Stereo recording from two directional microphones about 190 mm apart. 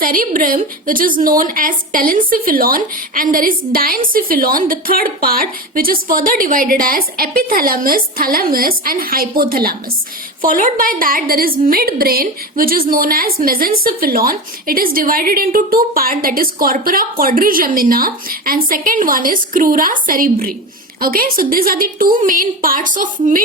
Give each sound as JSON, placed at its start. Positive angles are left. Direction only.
{"t": 0.0, "sound": "speech", "side_deg": -45}